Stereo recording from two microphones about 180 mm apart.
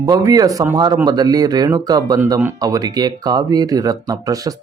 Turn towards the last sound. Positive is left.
turn(degrees=-20)  # may be behind; listen again after turning